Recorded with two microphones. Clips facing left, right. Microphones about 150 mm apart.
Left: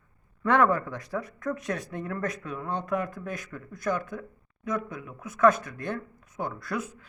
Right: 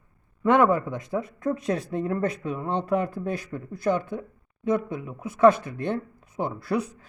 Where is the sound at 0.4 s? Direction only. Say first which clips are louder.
Right 3 dB; 20° right (ahead or behind).